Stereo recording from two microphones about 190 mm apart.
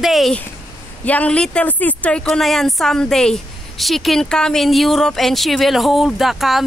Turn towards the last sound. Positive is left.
turn(degrees=0)  # may be behind; listen again after turning